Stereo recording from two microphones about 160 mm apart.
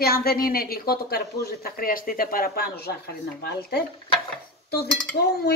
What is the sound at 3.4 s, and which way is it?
Cutlery, 85° left.